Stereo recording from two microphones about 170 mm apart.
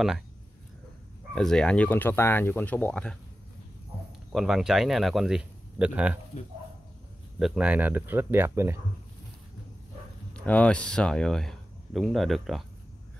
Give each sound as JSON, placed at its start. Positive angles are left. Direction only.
{"t": 1.3, "sound": "speech", "side_deg": 5}
{"t": 4.3, "sound": "speech", "side_deg": 0}
{"t": 7.3, "sound": "speech", "side_deg": -5}
{"t": 10.3, "sound": "speech", "side_deg": 10}